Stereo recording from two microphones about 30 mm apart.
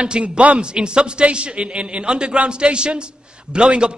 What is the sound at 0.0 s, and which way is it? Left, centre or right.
A man's voice, right.